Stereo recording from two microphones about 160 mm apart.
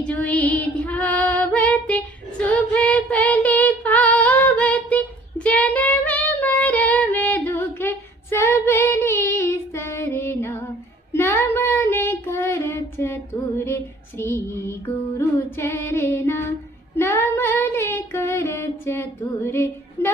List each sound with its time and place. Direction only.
0.0 s female singing: 10° left (ahead or behind)
11.1 s child singing: 15° left (ahead or behind)